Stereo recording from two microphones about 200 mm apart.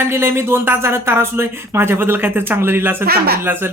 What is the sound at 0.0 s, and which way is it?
Speech, 10° right (ahead or behind).